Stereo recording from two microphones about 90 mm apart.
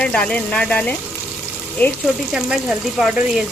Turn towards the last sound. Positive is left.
turn(degrees=-5)  # may be behind; listen again after turning